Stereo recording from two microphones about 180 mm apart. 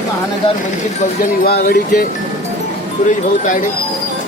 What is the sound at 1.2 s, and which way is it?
Speech, 50° left (ahead or behind).